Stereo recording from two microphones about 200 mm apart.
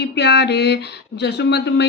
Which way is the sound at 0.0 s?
60° left (ahead or behind).